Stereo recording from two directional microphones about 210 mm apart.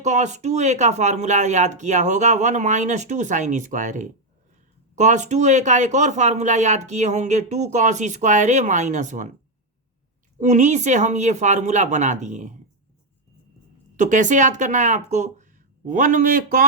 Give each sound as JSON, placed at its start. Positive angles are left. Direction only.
{"t": 0.0, "sound": "speech", "side_deg": -35}
{"t": 10.3, "sound": "speech", "side_deg": -35}
{"t": 13.9, "sound": "speech", "side_deg": -35}